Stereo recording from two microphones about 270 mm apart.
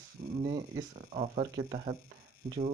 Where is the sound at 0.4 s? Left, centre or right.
Right.